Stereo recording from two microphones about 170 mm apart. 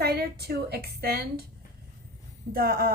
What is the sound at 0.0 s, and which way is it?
A woman's voice, 70° right (ahead or behind).